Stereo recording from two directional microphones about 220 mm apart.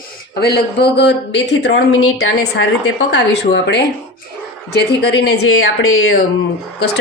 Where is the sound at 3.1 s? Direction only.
50° left (ahead or behind).